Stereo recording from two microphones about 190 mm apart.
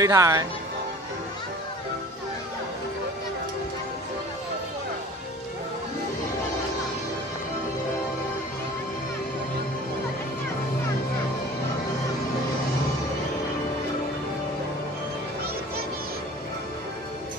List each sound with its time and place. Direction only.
0.0 s speech: 15° right (ahead or behind)